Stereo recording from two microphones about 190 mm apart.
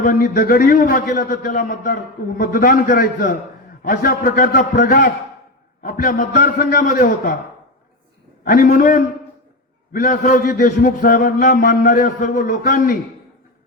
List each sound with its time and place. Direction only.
0.0 s a man's voice: 50° left (ahead or behind)
8.4 s a man's voice: 45° left (ahead or behind)